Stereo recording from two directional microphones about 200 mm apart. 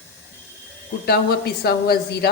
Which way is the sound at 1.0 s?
50° left (ahead or behind).